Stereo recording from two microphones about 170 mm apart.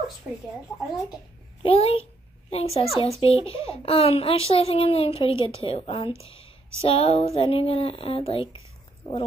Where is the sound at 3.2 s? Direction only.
35° left (ahead or behind).